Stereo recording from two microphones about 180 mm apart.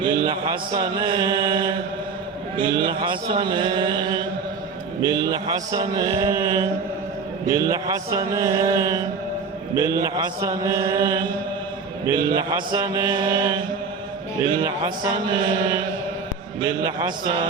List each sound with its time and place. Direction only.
0.0 s mantra: 25° right (ahead or behind)
16.6 s mantra: 25° right (ahead or behind)